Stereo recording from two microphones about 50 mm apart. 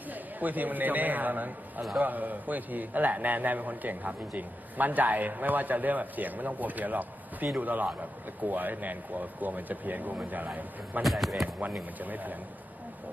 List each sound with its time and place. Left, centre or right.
0.1 s a man's voice: right
11.0 s speech: centre
11.9 s a man's voice: right